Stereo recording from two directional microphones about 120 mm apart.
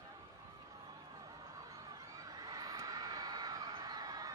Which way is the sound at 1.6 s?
30° right (ahead or behind).